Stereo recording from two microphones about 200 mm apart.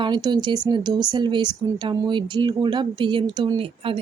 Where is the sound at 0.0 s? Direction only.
20° right (ahead or behind).